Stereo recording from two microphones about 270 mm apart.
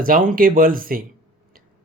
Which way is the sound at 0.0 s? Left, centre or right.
Right.